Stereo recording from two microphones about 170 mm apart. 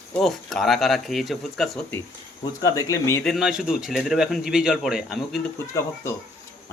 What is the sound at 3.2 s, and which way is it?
A man's voice, centre (ahead or behind).